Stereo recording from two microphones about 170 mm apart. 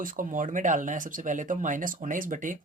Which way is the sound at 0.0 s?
50° right (ahead or behind).